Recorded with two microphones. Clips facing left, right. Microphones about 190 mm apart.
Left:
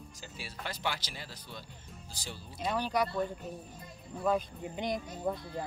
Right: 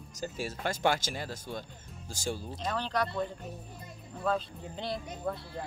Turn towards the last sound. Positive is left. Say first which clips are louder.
# left 1 dB
turn(degrees=15)  # may be behind; listen again after turning